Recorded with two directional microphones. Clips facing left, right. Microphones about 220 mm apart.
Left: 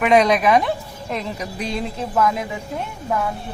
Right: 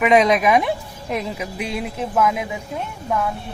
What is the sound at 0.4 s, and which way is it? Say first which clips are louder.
Speech: even; 15° right (ahead or behind).